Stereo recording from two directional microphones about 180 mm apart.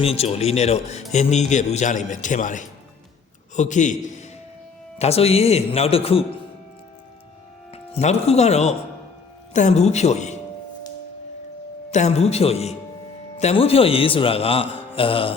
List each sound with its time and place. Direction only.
0.0 s a man's voice: 35° left (ahead or behind)
7.7 s speech: 35° left (ahead or behind)
11.9 s speech: 40° left (ahead or behind)